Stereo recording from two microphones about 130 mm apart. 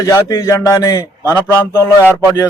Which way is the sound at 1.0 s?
15° right (ahead or behind).